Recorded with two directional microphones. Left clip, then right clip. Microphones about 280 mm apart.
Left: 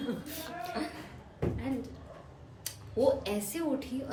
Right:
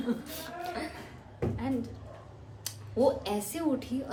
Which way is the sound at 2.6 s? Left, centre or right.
Centre.